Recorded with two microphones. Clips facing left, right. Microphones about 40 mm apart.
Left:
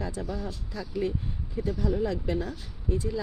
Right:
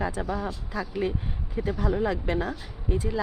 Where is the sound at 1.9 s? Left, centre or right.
Right.